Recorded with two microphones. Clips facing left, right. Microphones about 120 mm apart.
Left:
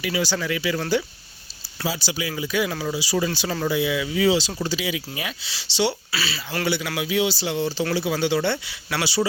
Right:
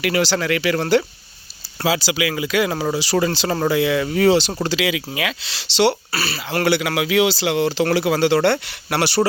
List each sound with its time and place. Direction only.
0.0 s speech: 80° right
1.8 s speech: 90° right
2.6 s speech: 55° right (ahead or behind); by 4.0 s 80° right
4.0 s speech: 55° right (ahead or behind)
4.6 s speech: 90° right; by 6.0 s 70° right (ahead or behind)
6.1 s speech: 50° right (ahead or behind)
6.7 s speech: 80° right